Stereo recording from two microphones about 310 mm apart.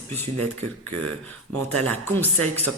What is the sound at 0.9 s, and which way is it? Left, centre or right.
A woman's voice, centre.